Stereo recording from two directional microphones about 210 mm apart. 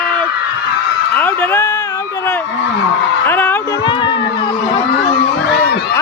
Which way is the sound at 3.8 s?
25° left (ahead or behind).